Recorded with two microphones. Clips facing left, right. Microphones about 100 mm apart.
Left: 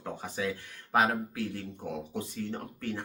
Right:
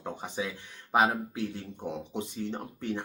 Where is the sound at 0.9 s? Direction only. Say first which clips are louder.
Right 1 dB; 20° right (ahead or behind).